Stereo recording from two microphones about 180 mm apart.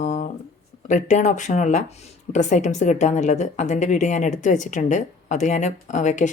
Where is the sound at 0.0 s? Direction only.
40° left (ahead or behind).